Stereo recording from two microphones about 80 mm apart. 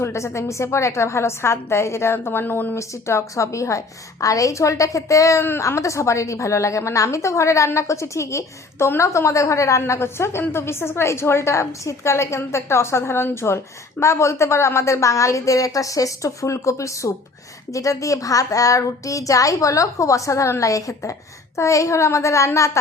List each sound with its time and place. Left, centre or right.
0.0 s a woman's voice: left
2.7 s a woman's voice: left